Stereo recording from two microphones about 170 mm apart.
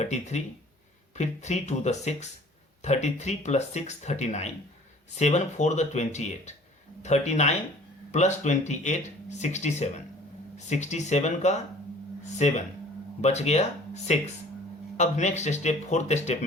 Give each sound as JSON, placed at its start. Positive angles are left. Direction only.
{"t": 0.0, "sound": "speech", "side_deg": 40}